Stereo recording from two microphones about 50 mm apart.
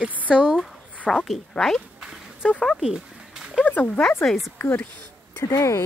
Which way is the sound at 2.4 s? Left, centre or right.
Left.